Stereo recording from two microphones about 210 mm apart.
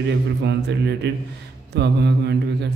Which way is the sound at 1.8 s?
55° right (ahead or behind).